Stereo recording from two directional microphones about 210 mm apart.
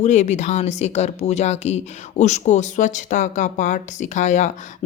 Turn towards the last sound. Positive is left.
turn(degrees=35)  # may be behind; listen again after turning